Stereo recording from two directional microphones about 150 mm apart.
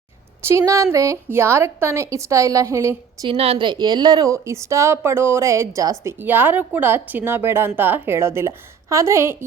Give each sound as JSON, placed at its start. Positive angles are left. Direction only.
{"t": 0.4, "sound": "a woman's voice", "side_deg": -20}
{"t": 3.2, "sound": "speech", "side_deg": -40}